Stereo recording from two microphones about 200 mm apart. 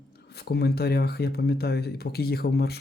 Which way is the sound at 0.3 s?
55° left (ahead or behind).